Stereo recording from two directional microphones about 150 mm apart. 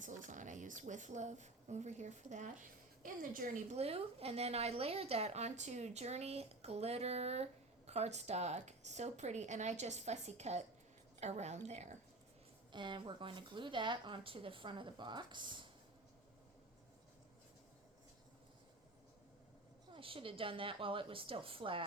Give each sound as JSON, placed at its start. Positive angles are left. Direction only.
{"t": 0.0, "sound": "speech", "side_deg": -55}
{"t": 3.8, "sound": "a woman's voice", "side_deg": -40}
{"t": 12.7, "sound": "speech", "side_deg": -30}
{"t": 19.9, "sound": "speech", "side_deg": -35}